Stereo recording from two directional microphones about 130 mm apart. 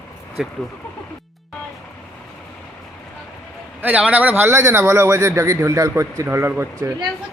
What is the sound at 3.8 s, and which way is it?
Speech, 10° right (ahead or behind).